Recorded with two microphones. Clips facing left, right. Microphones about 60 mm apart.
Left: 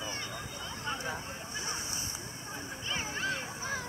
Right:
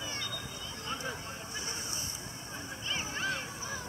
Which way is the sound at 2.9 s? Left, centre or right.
Left.